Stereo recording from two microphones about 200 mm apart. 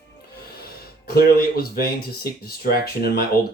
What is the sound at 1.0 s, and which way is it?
Speech, 50° left (ahead or behind).